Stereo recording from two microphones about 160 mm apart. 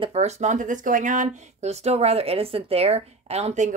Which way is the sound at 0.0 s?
40° right (ahead or behind).